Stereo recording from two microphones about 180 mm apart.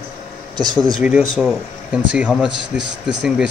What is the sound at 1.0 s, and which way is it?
Speech, 5° right (ahead or behind).